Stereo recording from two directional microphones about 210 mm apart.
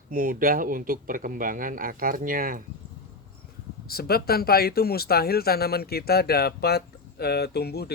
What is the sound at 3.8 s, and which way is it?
Speech, 45° left (ahead or behind).